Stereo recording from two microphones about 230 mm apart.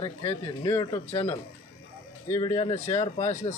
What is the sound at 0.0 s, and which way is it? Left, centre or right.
A man's voice, left.